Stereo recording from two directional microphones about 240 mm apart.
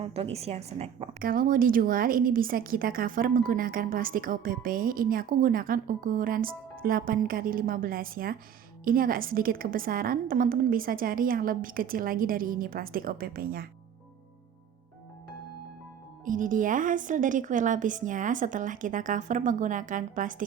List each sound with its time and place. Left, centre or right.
0.0 s a woman's voice: right
16.2 s a woman's voice: right